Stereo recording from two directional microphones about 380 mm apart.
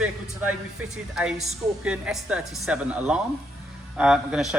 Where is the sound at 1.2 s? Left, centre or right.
Centre.